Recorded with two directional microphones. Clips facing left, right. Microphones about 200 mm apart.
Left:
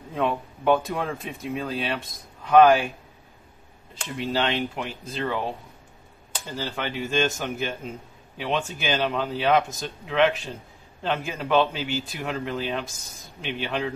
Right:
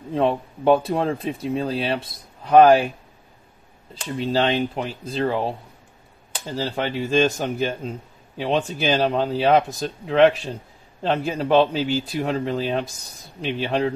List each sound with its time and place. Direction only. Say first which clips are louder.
0.1 s speech: right 5 dB; 30° right (ahead or behind)
4.2 s speech: right 5 dB; 35° right (ahead or behind)
6.5 s speech: right 5 dB; 35° right (ahead or behind)